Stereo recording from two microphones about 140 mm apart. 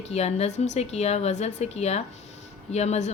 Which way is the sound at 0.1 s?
50° left (ahead or behind).